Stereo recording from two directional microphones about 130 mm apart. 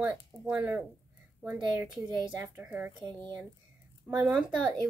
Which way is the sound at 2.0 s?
25° right (ahead or behind).